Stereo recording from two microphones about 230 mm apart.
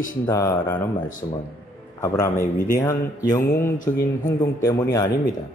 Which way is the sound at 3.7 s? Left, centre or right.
Left.